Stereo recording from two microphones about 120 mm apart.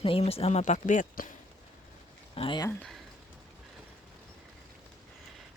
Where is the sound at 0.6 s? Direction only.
90° left.